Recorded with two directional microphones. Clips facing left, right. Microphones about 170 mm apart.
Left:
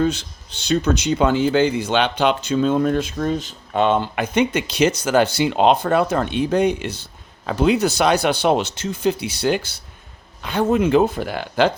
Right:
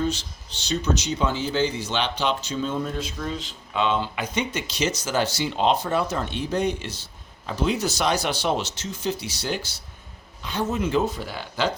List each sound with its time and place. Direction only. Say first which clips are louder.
0.0 s speech: left 6 dB; 55° left (ahead or behind)